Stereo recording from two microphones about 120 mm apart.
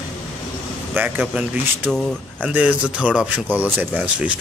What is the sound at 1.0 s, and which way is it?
Speech, 10° right (ahead or behind).